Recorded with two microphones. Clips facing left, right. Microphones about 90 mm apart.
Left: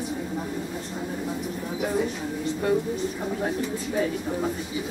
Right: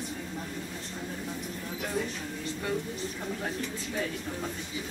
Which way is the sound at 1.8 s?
15° left (ahead or behind).